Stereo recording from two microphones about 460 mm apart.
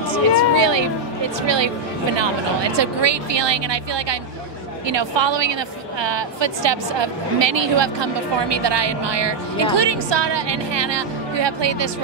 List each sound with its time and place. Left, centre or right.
0.4 s music: right
2.1 s a woman's voice: right